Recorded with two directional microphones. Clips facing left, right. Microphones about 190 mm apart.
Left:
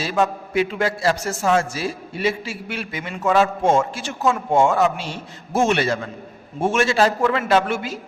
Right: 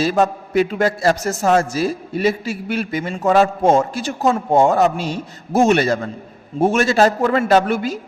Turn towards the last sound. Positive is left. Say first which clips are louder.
# right 4 dB
turn(degrees=-40)  # may be behind; listen again after turning